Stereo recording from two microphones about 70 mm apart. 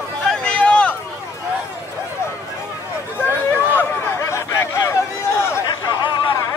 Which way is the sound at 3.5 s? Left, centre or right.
Left.